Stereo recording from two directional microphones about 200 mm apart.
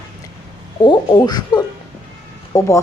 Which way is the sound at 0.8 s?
20° left (ahead or behind).